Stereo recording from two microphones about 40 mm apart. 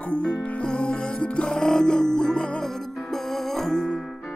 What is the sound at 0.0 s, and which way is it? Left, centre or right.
Music, left.